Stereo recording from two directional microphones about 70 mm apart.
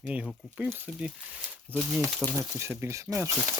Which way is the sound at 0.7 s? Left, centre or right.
Right.